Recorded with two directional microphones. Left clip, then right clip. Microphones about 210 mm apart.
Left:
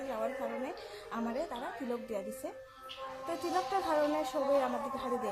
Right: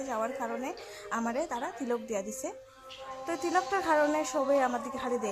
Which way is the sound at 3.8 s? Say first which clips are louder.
Right 4 dB; 20° right (ahead or behind).